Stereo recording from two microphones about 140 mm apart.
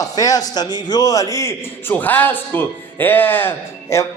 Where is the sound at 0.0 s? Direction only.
25° left (ahead or behind).